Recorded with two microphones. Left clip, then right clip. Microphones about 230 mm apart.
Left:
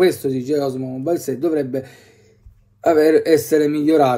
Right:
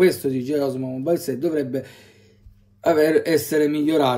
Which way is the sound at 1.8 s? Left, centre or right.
Right.